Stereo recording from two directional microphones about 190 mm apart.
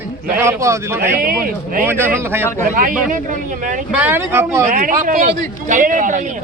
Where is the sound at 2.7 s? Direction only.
45° right (ahead or behind).